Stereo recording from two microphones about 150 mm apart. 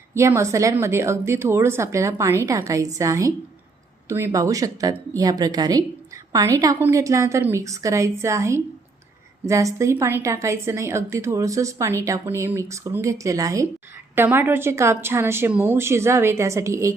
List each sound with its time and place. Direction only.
0.1 s a woman's voice: 20° right (ahead or behind)